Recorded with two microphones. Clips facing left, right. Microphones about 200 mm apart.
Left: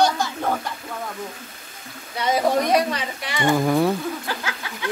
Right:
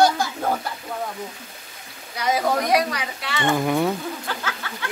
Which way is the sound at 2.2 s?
25° left (ahead or behind).